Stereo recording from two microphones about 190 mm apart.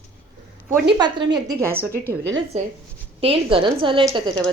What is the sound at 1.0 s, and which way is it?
Speech, 25° right (ahead or behind).